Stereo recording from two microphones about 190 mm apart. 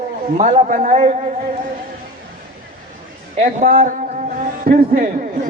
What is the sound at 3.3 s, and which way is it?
A man's voice, 45° right (ahead or behind).